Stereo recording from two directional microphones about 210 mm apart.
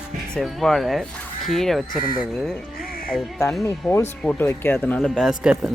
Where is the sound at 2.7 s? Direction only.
45° left (ahead or behind).